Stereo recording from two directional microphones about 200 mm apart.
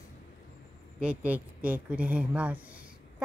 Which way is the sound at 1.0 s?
5° right (ahead or behind).